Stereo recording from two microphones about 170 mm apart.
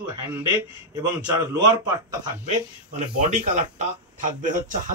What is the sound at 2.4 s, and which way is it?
Speech, 45° right (ahead or behind).